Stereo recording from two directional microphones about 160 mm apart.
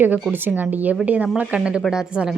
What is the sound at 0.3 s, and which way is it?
Speech, 10° right (ahead or behind).